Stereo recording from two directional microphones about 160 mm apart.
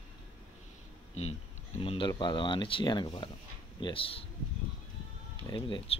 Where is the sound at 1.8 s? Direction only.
35° left (ahead or behind).